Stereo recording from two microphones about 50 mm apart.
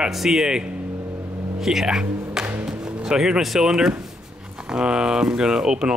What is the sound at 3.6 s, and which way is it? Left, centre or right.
Speech, centre.